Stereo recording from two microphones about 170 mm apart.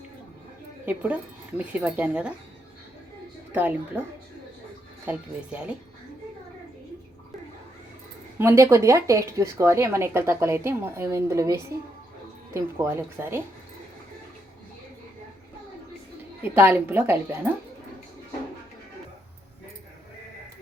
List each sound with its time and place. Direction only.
0.9 s speech: 10° right (ahead or behind)
3.5 s speech: 10° right (ahead or behind)
5.0 s speech: 5° right (ahead or behind)
8.4 s speech: 15° right (ahead or behind)
16.4 s speech: 10° right (ahead or behind)